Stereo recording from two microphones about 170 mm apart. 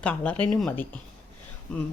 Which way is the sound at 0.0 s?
5° left (ahead or behind).